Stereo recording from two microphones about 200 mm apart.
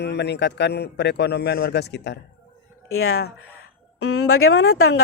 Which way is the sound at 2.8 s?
90° left.